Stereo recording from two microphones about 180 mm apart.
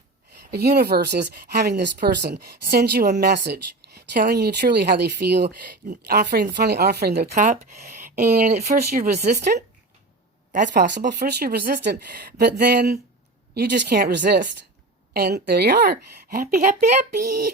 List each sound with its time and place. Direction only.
0.5 s speech: 60° right (ahead or behind); by 10.8 s 45° right (ahead or behind)
11.1 s speech: 65° right (ahead or behind)